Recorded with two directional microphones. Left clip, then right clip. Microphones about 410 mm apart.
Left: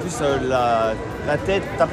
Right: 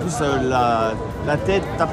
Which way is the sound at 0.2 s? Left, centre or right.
Centre.